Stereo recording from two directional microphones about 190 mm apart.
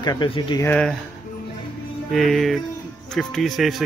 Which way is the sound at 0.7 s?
5° left (ahead or behind).